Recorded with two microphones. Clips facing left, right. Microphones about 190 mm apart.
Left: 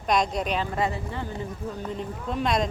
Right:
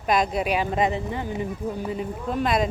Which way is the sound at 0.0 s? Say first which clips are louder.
Right 2 dB; 5° right (ahead or behind).